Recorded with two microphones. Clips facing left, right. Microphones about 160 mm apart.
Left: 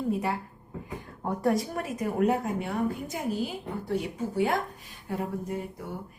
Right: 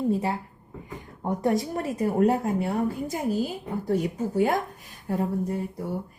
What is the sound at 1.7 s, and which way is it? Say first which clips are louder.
A woman's voice: right 5 dB; 35° right (ahead or behind).